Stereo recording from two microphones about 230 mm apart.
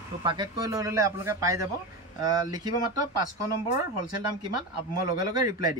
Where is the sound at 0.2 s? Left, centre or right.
Centre.